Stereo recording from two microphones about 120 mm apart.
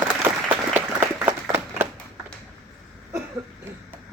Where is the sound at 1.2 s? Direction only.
20° right (ahead or behind).